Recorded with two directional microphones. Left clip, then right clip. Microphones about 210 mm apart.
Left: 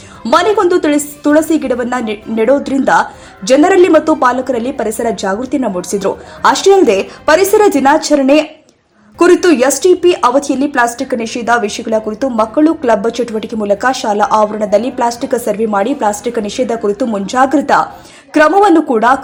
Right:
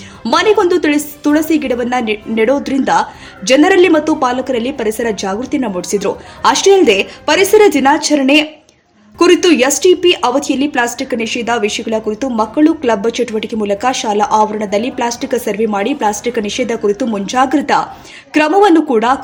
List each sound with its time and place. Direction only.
0.2 s speech: centre (ahead or behind)